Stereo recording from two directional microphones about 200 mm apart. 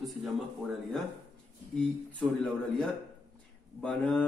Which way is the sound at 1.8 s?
Centre (ahead or behind).